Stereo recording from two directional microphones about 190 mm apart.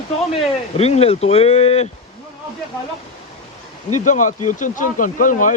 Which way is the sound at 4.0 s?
40° left (ahead or behind).